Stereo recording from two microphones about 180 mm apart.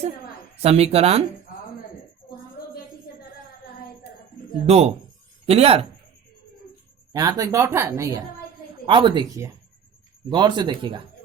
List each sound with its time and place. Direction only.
0.6 s speech: 35° right (ahead or behind)
4.6 s speech: 35° right (ahead or behind)
7.1 s a woman's voice: 20° right (ahead or behind)